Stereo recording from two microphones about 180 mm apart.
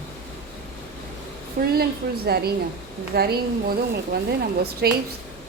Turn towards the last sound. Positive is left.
turn(degrees=-60)  # may be behind; listen again after turning